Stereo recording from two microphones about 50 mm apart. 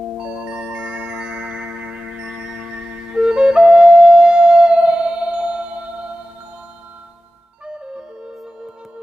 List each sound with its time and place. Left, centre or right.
0.2 s music: centre
7.7 s music: centre